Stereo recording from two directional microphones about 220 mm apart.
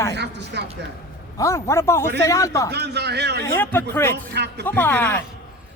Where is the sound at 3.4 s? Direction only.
10° left (ahead or behind).